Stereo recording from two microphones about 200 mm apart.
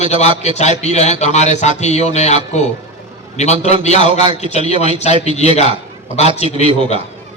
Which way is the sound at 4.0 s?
25° right (ahead or behind).